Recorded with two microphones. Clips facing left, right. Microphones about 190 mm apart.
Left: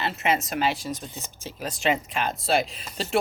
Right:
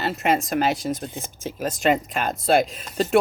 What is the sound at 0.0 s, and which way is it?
Speech, 40° right (ahead or behind).